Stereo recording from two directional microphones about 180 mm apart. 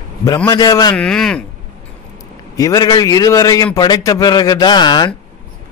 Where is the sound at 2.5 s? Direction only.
20° left (ahead or behind).